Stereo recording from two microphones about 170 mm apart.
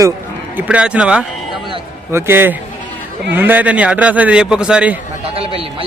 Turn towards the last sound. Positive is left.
turn(degrees=-35)  # may be behind; listen again after turning